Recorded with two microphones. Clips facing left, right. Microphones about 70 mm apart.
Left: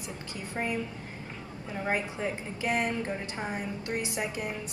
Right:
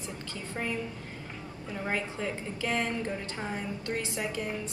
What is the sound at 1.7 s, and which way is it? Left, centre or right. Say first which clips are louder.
A woman's voice: left 2 dB; centre.